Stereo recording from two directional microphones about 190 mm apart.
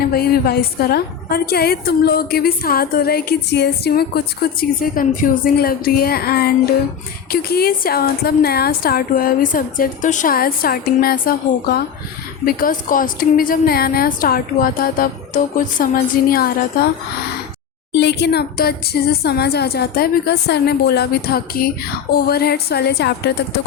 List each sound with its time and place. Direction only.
0.1 s a woman's voice: 55° left (ahead or behind)
4.8 s a woman's voice: 45° left (ahead or behind)
17.9 s a woman's voice: 65° left (ahead or behind)